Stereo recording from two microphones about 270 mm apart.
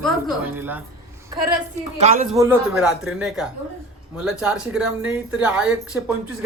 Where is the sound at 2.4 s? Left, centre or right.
Centre.